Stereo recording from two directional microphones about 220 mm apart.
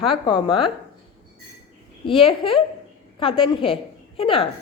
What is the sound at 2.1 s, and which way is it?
A woman's voice, 25° left (ahead or behind).